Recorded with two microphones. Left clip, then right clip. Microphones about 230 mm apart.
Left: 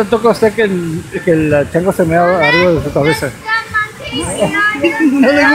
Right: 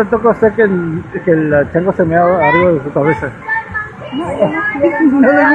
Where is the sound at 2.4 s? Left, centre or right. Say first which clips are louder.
Even; left.